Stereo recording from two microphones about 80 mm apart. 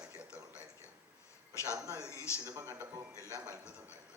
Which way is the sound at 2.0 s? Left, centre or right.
Left.